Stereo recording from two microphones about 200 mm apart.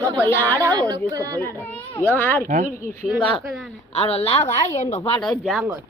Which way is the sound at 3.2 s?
25° left (ahead or behind).